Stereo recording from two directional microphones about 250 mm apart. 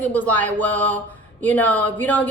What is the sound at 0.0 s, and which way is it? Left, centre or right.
A woman's voice, centre.